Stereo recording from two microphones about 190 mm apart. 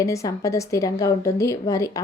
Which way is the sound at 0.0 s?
15° left (ahead or behind).